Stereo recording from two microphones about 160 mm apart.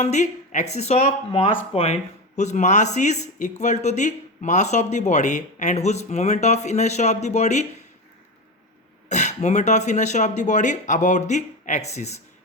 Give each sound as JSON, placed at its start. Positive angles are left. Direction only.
{"t": 0.0, "sound": "speech", "side_deg": 45}
{"t": 9.0, "sound": "speech", "side_deg": 45}